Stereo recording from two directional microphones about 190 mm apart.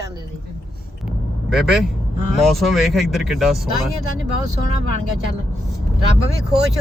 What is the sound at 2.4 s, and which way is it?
Speech, centre (ahead or behind).